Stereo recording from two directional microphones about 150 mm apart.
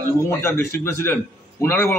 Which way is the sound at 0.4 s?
20° left (ahead or behind).